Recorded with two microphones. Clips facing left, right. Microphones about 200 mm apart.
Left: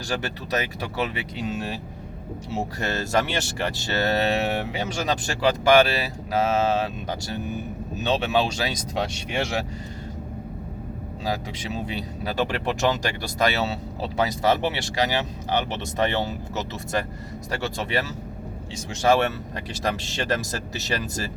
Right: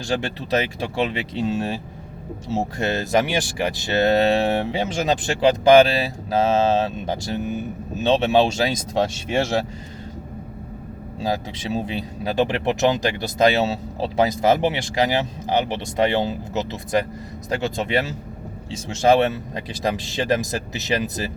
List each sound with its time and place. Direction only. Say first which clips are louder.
0.1 s speech: right 5 dB; 25° right (ahead or behind)
11.3 s speech: right 4 dB; 30° right (ahead or behind)
12.2 s speech: right 5 dB; 15° right (ahead or behind)
19.0 s speech: right 4 dB; 20° right (ahead or behind)